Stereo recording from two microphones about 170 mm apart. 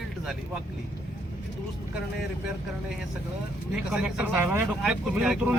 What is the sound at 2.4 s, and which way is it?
Speech, 5° right (ahead or behind).